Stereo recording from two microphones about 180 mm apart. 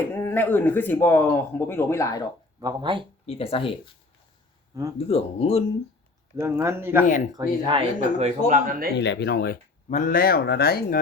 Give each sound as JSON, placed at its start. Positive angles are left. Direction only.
{"t": 0.1, "sound": "speech", "side_deg": 10}
{"t": 2.6, "sound": "speech", "side_deg": -25}
{"t": 3.2, "sound": "speech", "side_deg": 30}
{"t": 4.9, "sound": "speech", "side_deg": 35}
{"t": 6.3, "sound": "speech", "side_deg": -15}
{"t": 7.3, "sound": "speech", "side_deg": -30}
{"t": 8.4, "sound": "speech", "side_deg": -45}
{"t": 9.0, "sound": "speech", "side_deg": 70}
{"t": 9.9, "sound": "speech", "side_deg": 50}